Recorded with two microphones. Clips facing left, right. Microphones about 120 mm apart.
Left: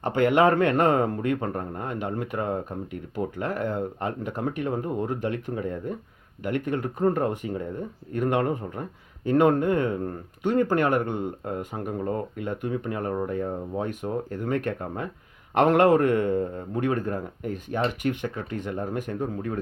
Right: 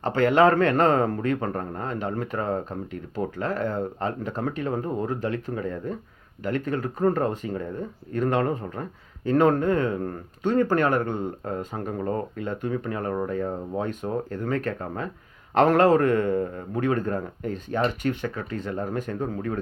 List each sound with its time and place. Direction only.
0.0 s a man's voice: 15° left (ahead or behind)